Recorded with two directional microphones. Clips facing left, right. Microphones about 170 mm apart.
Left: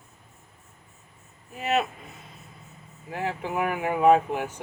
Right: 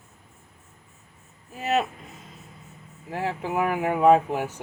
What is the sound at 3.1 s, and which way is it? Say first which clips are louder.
Speech: right 2 dB; 35° right (ahead or behind).